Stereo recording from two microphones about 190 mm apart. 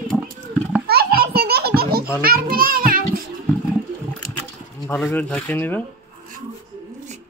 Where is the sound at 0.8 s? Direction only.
55° right (ahead or behind).